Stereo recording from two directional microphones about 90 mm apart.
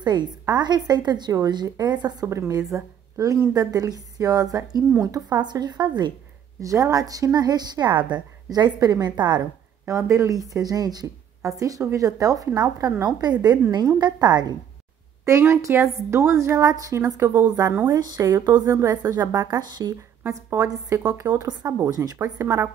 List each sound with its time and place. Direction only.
0.0 s a woman's voice: 50° right (ahead or behind)
2.2 s a woman's voice: 35° right (ahead or behind)
5.4 s a woman's voice: 55° right (ahead or behind)
6.6 s a woman's voice: 40° right (ahead or behind)
9.4 s a woman's voice: 35° right (ahead or behind); by 14.5 s 50° right (ahead or behind)
15.2 s speech: 35° right (ahead or behind)
17.2 s a woman's voice: 20° right (ahead or behind)
17.5 s speech: 40° right (ahead or behind)
19.7 s a woman's voice: 50° right (ahead or behind)
21.2 s a woman's voice: 40° right (ahead or behind)
21.6 s speech: 30° right (ahead or behind)